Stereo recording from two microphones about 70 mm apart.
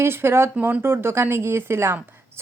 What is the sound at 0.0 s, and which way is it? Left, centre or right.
Speech, right.